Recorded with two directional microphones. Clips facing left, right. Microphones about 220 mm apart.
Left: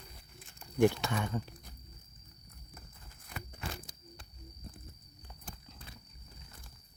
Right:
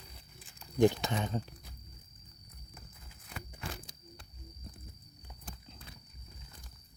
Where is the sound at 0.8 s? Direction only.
20° right (ahead or behind).